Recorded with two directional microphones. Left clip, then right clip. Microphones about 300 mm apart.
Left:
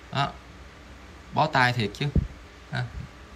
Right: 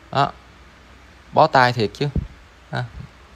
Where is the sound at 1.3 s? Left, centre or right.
Centre.